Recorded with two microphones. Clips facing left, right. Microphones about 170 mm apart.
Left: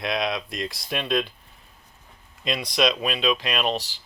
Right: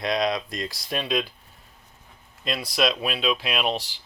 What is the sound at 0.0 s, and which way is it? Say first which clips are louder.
Speech: right 2 dB; centre (ahead or behind).